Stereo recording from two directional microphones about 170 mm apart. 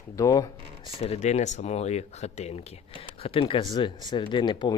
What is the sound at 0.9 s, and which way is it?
Speech, 35° left (ahead or behind).